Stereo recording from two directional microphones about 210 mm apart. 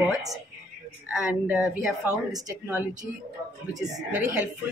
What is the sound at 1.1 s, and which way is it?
Speech, 5° right (ahead or behind).